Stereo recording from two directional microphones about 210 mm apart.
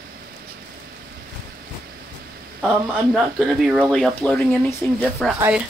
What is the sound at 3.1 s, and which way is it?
Speech, centre (ahead or behind).